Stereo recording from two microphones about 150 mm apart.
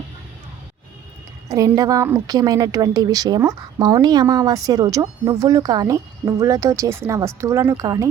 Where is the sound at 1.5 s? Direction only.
20° right (ahead or behind).